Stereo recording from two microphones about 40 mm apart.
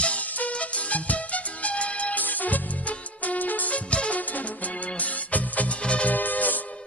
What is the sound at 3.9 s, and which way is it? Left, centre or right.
Music, left.